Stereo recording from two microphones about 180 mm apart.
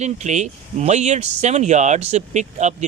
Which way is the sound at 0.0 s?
40° right (ahead or behind).